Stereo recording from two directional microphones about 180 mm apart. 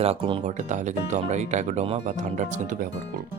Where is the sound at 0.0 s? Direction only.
30° right (ahead or behind).